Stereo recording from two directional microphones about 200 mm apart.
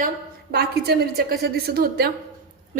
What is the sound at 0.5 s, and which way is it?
A woman's voice, 55° right (ahead or behind).